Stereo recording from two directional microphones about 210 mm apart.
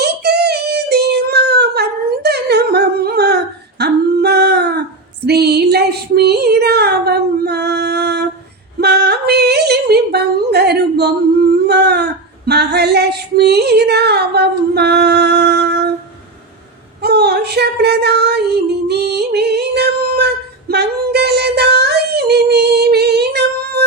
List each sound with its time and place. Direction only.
0.0 s child singing: 50° right (ahead or behind)
5.2 s a sound: 50° right (ahead or behind)
11.7 s humming: 50° right (ahead or behind)
12.5 s female singing: 50° right (ahead or behind)
17.0 s female singing: 50° right (ahead or behind)